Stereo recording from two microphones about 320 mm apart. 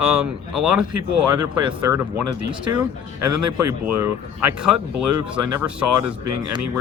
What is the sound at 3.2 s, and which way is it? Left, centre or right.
Speech, right.